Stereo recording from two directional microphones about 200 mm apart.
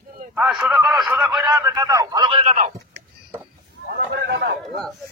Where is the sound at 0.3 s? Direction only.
5° right (ahead or behind).